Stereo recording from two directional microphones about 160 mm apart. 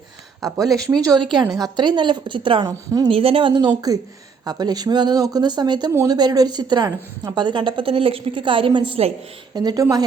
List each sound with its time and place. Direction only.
0.4 s speech: 20° right (ahead or behind)
3.1 s a woman's voice: 35° right (ahead or behind)
9.6 s speech: 25° right (ahead or behind)